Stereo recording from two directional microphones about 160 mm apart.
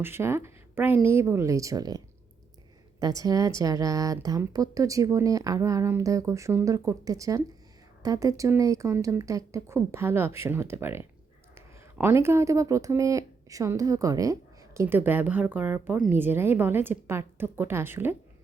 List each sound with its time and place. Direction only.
0.0 s speech: 15° right (ahead or behind)
3.0 s a woman's voice: 20° right (ahead or behind)